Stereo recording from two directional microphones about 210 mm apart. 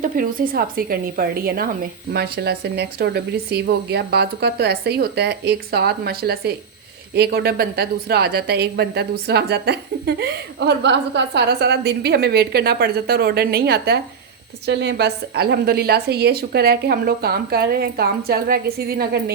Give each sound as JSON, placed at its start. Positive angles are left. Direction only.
{"t": 0.0, "sound": "a woman's voice", "side_deg": -40}